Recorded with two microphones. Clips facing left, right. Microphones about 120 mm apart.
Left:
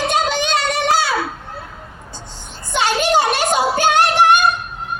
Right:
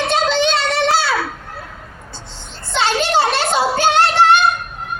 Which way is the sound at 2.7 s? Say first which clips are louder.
Even; 15° left (ahead or behind).